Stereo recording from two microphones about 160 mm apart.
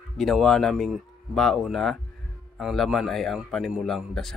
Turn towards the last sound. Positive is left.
turn(degrees=0)  # may be behind; listen again after turning